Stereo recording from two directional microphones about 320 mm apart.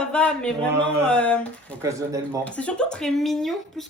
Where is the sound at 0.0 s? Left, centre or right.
Centre.